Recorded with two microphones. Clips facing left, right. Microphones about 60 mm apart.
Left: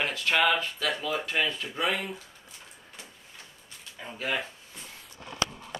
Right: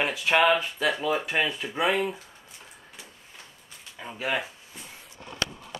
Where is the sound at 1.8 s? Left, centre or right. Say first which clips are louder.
Right 5 dB; centre.